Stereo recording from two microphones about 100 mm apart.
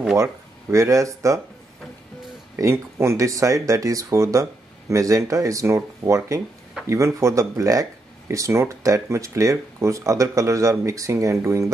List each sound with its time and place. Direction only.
0.1 s speech: 30° right (ahead or behind)
2.5 s speech: 25° right (ahead or behind)